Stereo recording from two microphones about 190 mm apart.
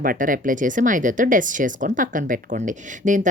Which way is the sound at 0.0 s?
45° right (ahead or behind).